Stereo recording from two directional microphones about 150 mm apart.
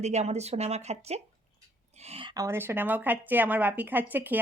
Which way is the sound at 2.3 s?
20° right (ahead or behind).